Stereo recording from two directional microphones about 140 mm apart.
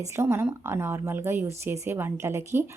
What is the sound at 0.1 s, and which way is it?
A woman's voice, 20° right (ahead or behind).